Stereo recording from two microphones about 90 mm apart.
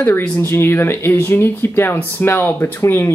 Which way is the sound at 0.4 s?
25° left (ahead or behind).